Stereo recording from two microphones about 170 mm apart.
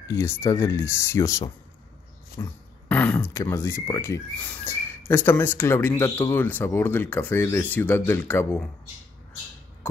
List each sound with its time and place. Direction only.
0.1 s speech: 15° left (ahead or behind)
2.9 s speech: 10° left (ahead or behind)